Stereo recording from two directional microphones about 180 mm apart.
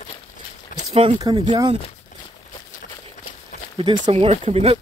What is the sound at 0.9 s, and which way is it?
Speech, 25° right (ahead or behind).